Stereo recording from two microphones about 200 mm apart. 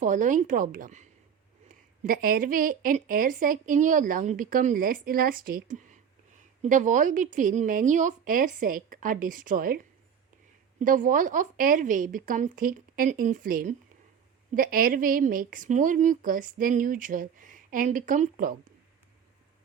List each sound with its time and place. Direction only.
0.0 s a woman's voice: 40° right (ahead or behind)